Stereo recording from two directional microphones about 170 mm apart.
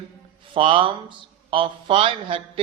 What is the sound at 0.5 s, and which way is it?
A man's voice, 30° right (ahead or behind).